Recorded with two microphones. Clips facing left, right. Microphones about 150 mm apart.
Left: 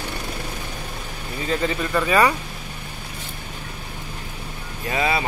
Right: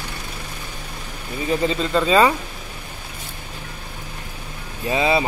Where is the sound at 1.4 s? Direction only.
20° right (ahead or behind).